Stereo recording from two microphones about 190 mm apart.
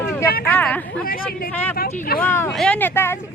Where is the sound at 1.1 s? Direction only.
50° left (ahead or behind).